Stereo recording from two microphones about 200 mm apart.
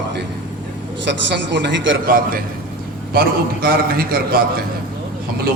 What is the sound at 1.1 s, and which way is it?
Speech, 65° right (ahead or behind).